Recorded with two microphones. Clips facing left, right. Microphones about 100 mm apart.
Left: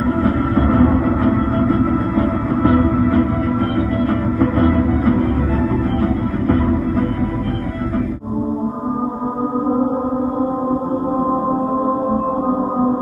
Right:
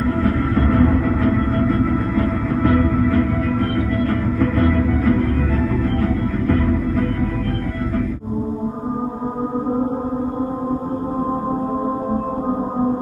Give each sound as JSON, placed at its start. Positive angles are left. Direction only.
{"t": 0.2, "sound": "music", "side_deg": 20}
{"t": 4.4, "sound": "music", "side_deg": 25}
{"t": 6.4, "sound": "music", "side_deg": 25}